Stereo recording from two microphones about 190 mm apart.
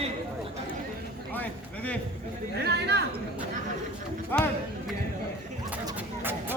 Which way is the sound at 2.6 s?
60° right (ahead or behind).